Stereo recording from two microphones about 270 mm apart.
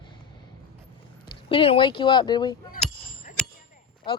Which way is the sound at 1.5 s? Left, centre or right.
Centre.